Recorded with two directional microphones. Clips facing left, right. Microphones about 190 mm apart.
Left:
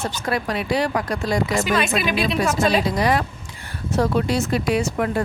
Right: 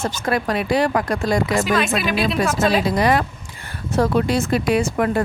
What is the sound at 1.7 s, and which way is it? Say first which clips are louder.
A woman's voice: right 1 dB; centre (ahead or behind).